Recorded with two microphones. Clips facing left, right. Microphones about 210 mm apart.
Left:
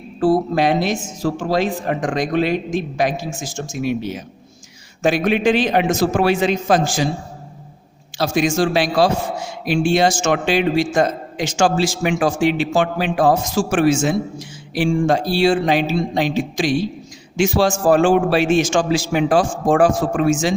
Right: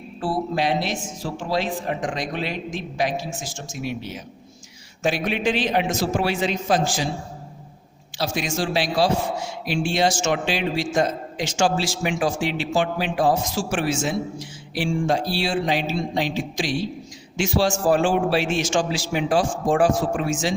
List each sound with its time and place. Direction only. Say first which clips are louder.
0.2 s a man's voice: left 8 dB; 45° left (ahead or behind)
8.4 s a man's voice: left 8 dB; 50° left (ahead or behind)